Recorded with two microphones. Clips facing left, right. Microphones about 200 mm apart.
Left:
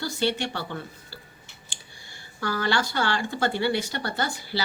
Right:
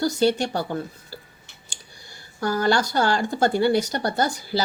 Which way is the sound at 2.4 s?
45° right (ahead or behind).